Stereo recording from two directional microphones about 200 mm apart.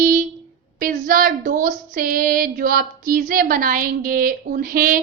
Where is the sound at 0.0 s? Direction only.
45° right (ahead or behind).